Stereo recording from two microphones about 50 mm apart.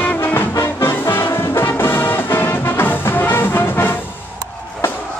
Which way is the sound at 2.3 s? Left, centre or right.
Left.